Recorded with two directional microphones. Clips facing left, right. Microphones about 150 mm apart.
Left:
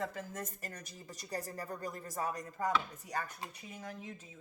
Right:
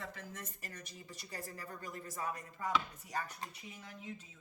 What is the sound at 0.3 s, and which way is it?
Speech, 45° left (ahead or behind).